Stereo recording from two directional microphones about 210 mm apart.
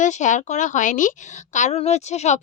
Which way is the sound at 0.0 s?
35° left (ahead or behind).